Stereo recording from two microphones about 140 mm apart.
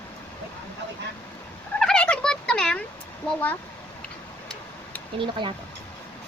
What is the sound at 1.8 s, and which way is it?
Turkey, 5° left (ahead or behind).